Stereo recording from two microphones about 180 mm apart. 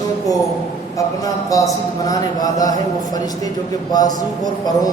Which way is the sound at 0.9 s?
20° left (ahead or behind).